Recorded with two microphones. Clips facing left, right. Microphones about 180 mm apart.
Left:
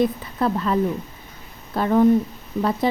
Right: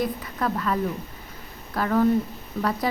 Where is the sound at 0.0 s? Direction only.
25° left (ahead or behind).